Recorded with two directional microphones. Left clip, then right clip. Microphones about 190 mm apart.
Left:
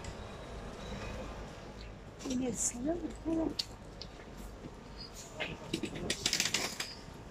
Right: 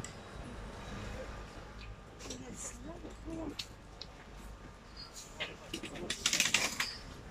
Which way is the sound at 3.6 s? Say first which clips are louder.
Left 5 dB; 25° left (ahead or behind).